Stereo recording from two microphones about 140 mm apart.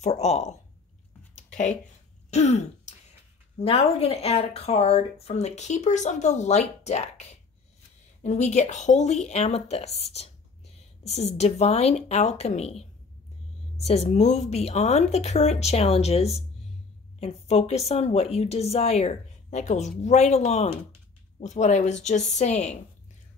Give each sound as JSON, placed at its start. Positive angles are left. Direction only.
{"t": 0.0, "sound": "speech", "side_deg": 50}
{"t": 1.3, "sound": "a sound", "side_deg": 60}
{"t": 2.3, "sound": "throat clearing", "side_deg": 55}
{"t": 3.5, "sound": "a woman's voice", "side_deg": 45}